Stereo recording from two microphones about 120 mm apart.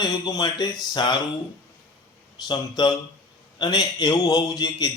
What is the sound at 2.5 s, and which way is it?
A man's voice, 35° left (ahead or behind).